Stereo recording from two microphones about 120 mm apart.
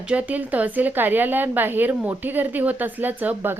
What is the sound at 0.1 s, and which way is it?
A woman's voice, 15° right (ahead or behind).